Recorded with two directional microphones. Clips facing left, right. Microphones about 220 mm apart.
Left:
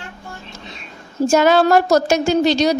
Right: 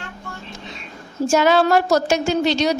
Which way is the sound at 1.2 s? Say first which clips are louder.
Left 2 dB; 45° left (ahead or behind).